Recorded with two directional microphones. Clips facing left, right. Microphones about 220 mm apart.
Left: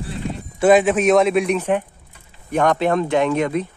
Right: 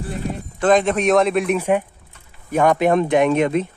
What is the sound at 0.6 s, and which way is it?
Speech, 10° left (ahead or behind).